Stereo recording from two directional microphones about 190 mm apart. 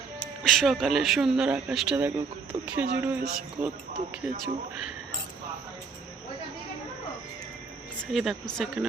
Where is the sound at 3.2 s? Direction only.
50° right (ahead or behind).